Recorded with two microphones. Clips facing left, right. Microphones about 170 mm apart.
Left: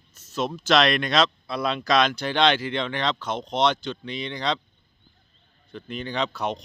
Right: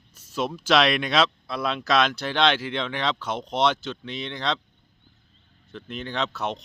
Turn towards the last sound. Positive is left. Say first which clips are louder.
# left 1 dB
turn(degrees=0)  # may be behind; listen again after turning